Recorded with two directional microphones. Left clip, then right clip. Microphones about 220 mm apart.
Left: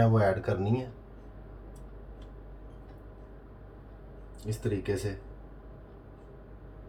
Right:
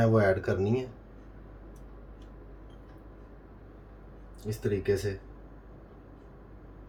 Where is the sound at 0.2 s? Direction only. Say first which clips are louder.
Right 2 dB; 30° right (ahead or behind).